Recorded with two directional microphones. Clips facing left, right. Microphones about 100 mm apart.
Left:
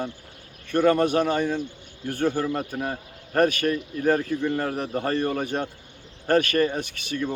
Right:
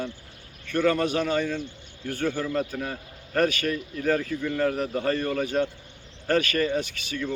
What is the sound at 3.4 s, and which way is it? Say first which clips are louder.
Speech: left 4 dB; 45° left (ahead or behind).